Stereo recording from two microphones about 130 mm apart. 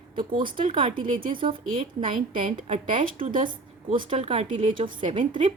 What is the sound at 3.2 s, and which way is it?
Speech, 90° right.